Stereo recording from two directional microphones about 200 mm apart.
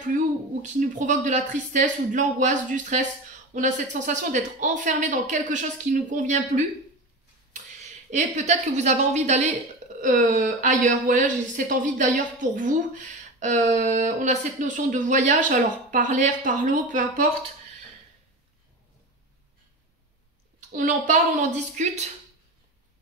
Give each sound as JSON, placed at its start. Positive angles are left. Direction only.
{"t": 0.0, "sound": "speech", "side_deg": -40}
{"t": 8.1, "sound": "speech", "side_deg": -35}
{"t": 20.7, "sound": "speech", "side_deg": -40}